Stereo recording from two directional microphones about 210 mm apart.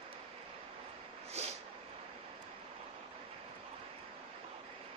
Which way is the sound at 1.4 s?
30° right (ahead or behind).